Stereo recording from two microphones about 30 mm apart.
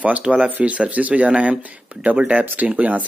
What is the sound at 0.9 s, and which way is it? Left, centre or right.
Speech, right.